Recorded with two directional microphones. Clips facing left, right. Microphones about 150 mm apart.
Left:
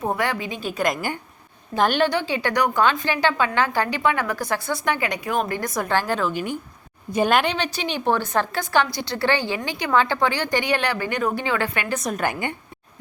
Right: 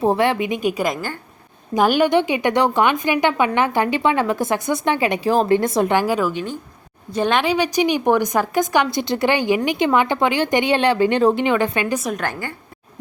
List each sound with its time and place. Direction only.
0.0 s a woman's voice: 25° right (ahead or behind); by 6.3 s 10° right (ahead or behind)
7.1 s a woman's voice: 10° left (ahead or behind)
7.5 s a woman's voice: 10° right (ahead or behind)
11.9 s a woman's voice: centre (ahead or behind)
12.2 s a woman's voice: 15° left (ahead or behind)